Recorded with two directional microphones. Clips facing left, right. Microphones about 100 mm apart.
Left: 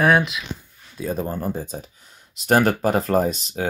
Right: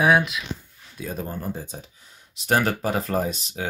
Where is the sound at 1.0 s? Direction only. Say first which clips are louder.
Left 6 dB; 40° left (ahead or behind).